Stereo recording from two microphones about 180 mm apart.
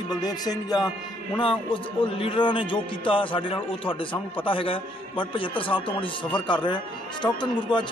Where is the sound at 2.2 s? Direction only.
30° left (ahead or behind).